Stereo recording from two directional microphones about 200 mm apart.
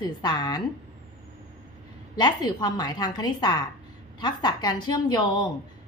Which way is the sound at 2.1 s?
20° left (ahead or behind).